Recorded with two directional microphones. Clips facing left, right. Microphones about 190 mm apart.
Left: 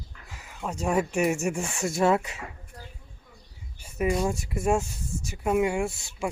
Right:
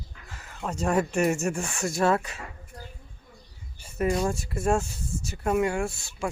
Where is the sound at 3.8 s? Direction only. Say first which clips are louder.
Even; 10° left (ahead or behind).